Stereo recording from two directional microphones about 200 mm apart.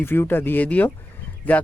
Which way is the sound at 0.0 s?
10° left (ahead or behind).